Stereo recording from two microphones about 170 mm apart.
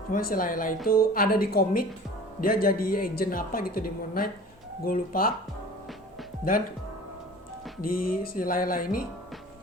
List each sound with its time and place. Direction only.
0.1 s speech: 55° left (ahead or behind)
7.8 s speech: 60° left (ahead or behind)